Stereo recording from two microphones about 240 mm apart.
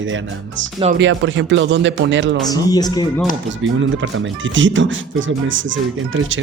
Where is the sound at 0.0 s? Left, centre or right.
Right.